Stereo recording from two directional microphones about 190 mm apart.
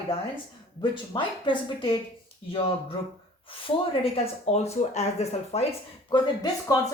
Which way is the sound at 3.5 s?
30° left (ahead or behind).